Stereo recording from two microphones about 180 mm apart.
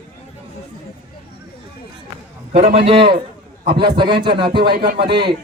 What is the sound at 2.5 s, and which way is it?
A man's voice, 35° right (ahead or behind).